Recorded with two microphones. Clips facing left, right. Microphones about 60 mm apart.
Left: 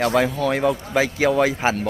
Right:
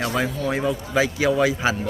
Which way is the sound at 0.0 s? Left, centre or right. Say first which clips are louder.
Left 5 dB; left.